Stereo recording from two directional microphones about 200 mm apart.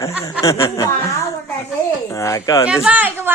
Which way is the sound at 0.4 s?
15° left (ahead or behind).